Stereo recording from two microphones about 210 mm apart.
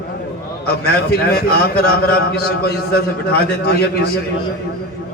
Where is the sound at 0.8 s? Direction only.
45° left (ahead or behind).